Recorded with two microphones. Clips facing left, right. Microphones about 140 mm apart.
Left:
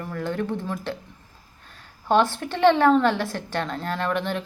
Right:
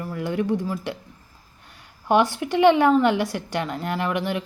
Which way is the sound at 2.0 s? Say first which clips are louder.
Right 1 dB; 15° right (ahead or behind).